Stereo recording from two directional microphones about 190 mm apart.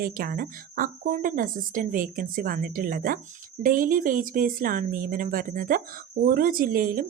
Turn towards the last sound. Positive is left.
turn(degrees=-50)  # may be behind; listen again after turning